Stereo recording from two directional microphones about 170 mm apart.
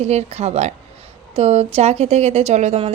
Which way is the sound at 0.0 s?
40° right (ahead or behind).